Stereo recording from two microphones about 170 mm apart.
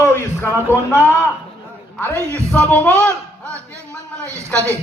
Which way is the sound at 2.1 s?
15° right (ahead or behind).